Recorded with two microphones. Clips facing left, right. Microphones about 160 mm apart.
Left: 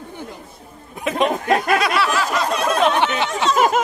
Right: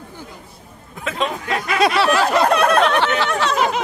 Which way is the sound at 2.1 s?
60° right (ahead or behind).